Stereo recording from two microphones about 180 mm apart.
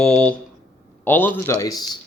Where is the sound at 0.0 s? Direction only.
5° left (ahead or behind).